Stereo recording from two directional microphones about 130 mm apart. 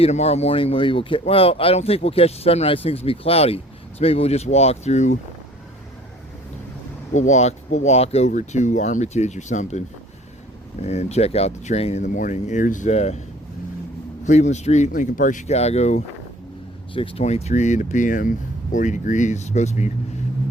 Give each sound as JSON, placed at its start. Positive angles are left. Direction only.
{"t": 0.0, "sound": "speech", "side_deg": 55}
{"t": 7.1, "sound": "speech", "side_deg": 65}
{"t": 8.3, "sound": "speech", "side_deg": 70}
{"t": 10.8, "sound": "speech", "side_deg": 55}
{"t": 14.3, "sound": "speech", "side_deg": 65}
{"t": 16.9, "sound": "speech", "side_deg": 45}
{"t": 17.2, "sound": "speech", "side_deg": 55}